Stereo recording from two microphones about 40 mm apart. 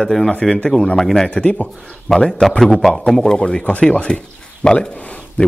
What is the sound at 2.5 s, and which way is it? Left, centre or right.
Speech, centre.